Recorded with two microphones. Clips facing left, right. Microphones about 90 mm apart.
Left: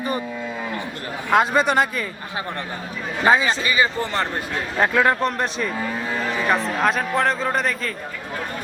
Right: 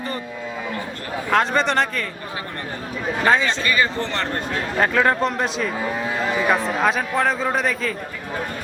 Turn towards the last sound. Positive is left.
turn(degrees=0)  # may be behind; listen again after turning